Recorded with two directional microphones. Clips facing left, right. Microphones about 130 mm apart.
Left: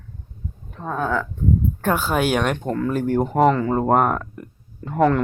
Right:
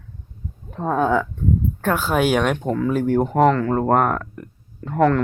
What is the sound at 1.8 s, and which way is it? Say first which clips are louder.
Speech: right 3 dB; centre (ahead or behind).